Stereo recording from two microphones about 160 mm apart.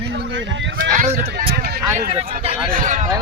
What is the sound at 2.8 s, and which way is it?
Speech, 55° right (ahead or behind).